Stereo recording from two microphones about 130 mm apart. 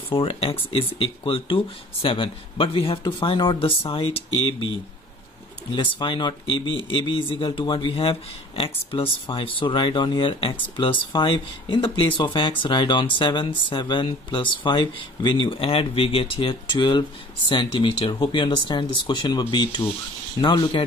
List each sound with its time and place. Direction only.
0.1 s speech: 45° left (ahead or behind)
5.9 s speech: 35° left (ahead or behind)